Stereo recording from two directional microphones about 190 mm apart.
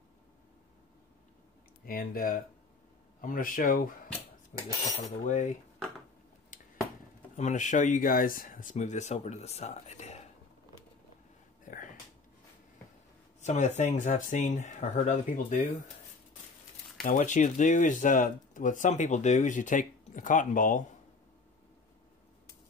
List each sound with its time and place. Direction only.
1.9 s speech: 50° left (ahead or behind)
7.3 s speech: 40° left (ahead or behind)
11.6 s a sound: 45° left (ahead or behind)
13.4 s speech: 35° left (ahead or behind)
17.0 s speech: 40° left (ahead or behind)